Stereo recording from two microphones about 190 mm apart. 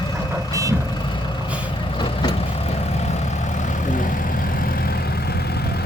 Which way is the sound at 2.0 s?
25° left (ahead or behind).